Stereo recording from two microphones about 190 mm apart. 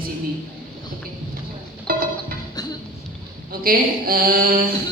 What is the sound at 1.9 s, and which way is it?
Music, 50° right (ahead or behind).